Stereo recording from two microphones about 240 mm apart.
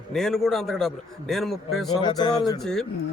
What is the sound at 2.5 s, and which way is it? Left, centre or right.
Speech, centre.